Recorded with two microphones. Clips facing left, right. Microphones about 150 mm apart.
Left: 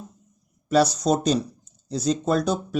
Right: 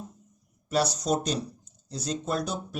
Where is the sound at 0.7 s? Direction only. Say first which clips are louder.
Left 6 dB; 90° left.